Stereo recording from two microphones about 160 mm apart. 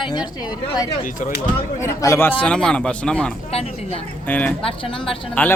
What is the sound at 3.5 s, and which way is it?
Speech, 40° left (ahead or behind).